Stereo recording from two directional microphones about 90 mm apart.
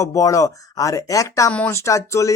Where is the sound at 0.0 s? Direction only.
35° left (ahead or behind).